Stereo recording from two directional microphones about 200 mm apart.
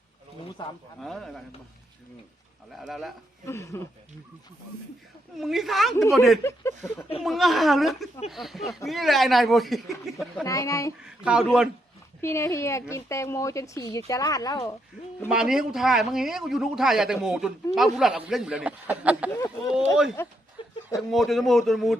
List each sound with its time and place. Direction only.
0.6 s speech: 20° left (ahead or behind)
0.9 s a man's voice: centre (ahead or behind)
2.7 s a man's voice: centre (ahead or behind)
3.4 s speech: 15° left (ahead or behind)
5.4 s a man's voice: centre (ahead or behind)
10.4 s speech: 15° left (ahead or behind)
11.0 s a man's voice: 5° right (ahead or behind)
12.2 s speech: 15° left (ahead or behind)
15.3 s a man's voice: 5° right (ahead or behind)
20.2 s speech: 10° left (ahead or behind)
20.6 s a sound: 25° left (ahead or behind)
21.1 s a man's voice: centre (ahead or behind)